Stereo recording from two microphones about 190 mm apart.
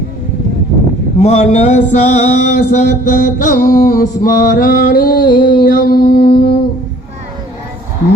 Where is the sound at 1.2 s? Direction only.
35° left (ahead or behind); by 6.3 s 50° left (ahead or behind).